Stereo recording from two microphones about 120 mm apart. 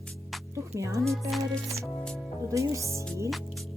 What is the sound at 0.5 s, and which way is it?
Music, 25° right (ahead or behind).